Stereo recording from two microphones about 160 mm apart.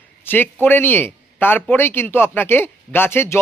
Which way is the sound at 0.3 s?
10° left (ahead or behind).